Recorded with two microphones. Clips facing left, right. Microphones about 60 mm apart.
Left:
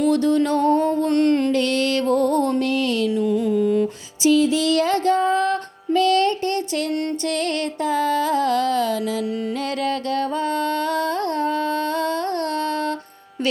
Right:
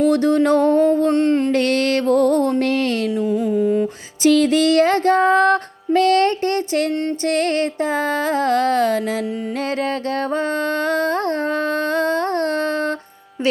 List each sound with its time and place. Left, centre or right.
0.1 s female singing: right
1.1 s music: centre
1.5 s music: right
3.2 s music: centre
4.5 s female singing: right
10.3 s female singing: right